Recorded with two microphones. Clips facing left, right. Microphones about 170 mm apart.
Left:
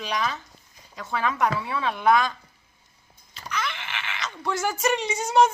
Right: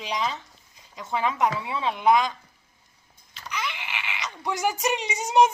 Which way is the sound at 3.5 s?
15° right (ahead or behind).